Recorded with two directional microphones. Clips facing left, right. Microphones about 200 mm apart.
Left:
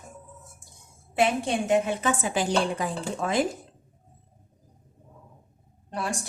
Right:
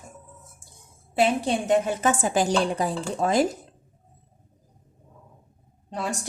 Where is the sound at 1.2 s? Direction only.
35° right (ahead or behind).